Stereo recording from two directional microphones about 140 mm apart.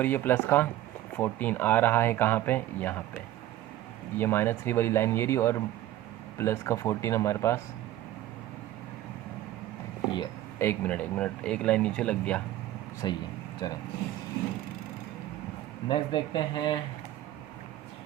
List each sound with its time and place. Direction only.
0.0 s speech: 15° left (ahead or behind)
4.2 s speech: 15° left (ahead or behind)
10.6 s speech: 15° left (ahead or behind)
13.0 s speech: 30° left (ahead or behind)
15.9 s speech: 35° left (ahead or behind)